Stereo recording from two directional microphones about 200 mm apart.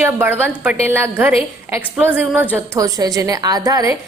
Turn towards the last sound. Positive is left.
turn(degrees=-15)  # may be behind; listen again after turning